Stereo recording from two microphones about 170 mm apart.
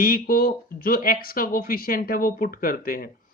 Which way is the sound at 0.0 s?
60° left (ahead or behind).